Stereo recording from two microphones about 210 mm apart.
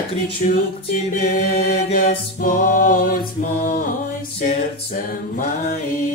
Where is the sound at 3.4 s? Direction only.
40° left (ahead or behind).